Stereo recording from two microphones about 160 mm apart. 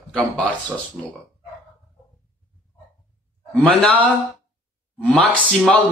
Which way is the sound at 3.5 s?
5° left (ahead or behind).